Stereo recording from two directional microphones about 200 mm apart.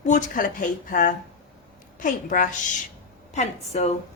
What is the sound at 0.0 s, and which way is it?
A woman's voice, 40° left (ahead or behind).